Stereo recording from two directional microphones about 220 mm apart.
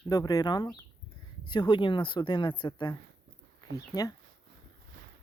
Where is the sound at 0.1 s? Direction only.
15° left (ahead or behind).